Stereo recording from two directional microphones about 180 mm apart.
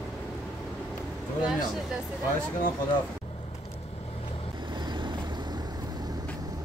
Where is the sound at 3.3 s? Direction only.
35° left (ahead or behind).